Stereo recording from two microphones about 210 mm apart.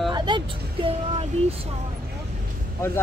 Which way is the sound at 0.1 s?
20° right (ahead or behind).